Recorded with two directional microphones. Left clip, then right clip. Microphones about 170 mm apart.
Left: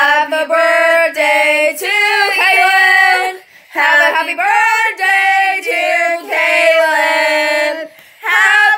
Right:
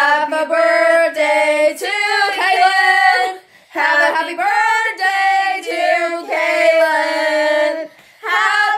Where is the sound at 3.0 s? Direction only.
Centre (ahead or behind).